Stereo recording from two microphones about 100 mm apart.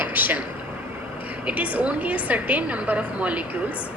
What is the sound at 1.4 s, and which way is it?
A woman's voice, 15° right (ahead or behind).